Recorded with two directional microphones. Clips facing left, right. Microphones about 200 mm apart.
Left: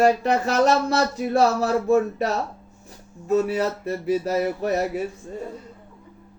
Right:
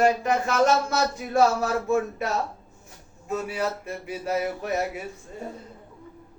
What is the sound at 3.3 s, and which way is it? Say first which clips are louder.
Speech: left 7 dB; 35° left (ahead or behind).